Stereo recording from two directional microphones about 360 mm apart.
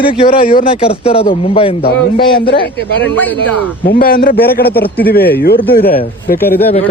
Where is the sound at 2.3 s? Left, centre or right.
Left.